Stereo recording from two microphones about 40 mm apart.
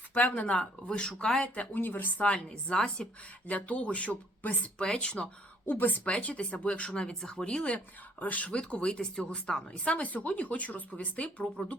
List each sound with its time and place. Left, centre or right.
0.1 s speech: left; by 1.5 s centre
1.7 s a woman's voice: left
2.2 s speech: left
3.4 s speech: left
4.8 s speech: left
5.6 s a woman's voice: left
6.1 s speech: left
6.8 s speech: centre
7.4 s speech: left
8.2 s a woman's voice: left
8.4 s speech: left
9.8 s speech: left